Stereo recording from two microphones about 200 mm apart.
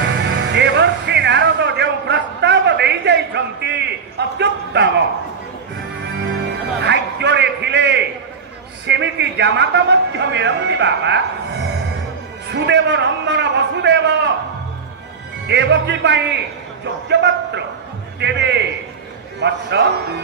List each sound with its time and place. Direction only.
0.0 s music: 60° right (ahead or behind)
4.4 s a man's voice: 60° right (ahead or behind)
6.8 s a man's voice: 60° right (ahead or behind)
15.4 s a man's voice: 60° right (ahead or behind)